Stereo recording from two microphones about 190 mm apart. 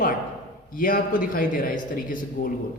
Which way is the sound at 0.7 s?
45° left (ahead or behind).